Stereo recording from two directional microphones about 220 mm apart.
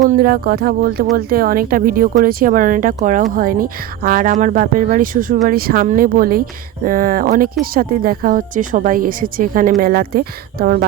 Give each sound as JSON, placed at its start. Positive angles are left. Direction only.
{"t": 0.1, "sound": "music", "side_deg": -45}
{"t": 1.1, "sound": "speech", "side_deg": -40}